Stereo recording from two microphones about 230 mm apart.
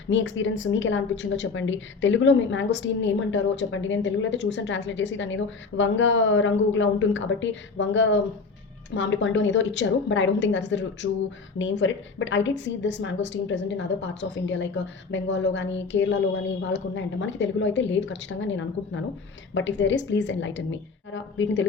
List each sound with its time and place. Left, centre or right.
0.1 s a woman's voice: left